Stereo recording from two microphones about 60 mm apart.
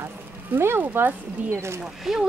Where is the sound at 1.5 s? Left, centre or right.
Right.